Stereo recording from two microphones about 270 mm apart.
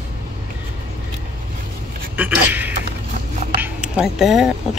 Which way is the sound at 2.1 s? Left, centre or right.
Centre.